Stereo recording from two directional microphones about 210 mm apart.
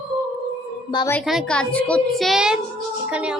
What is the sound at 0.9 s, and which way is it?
Speech, 20° left (ahead or behind).